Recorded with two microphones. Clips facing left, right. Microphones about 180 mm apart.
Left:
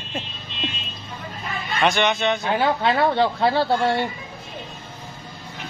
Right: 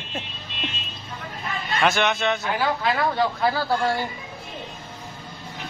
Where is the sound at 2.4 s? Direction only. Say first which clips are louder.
Left 3 dB; 25° left (ahead or behind).